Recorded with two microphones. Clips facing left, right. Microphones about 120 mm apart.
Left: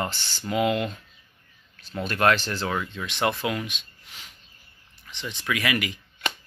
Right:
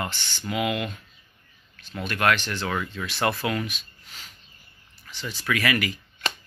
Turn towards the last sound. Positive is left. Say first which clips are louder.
# right 1 dB
turn(degrees=20)  # may be behind; listen again after turning